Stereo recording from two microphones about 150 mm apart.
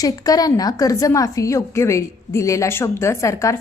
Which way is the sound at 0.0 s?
25° left (ahead or behind).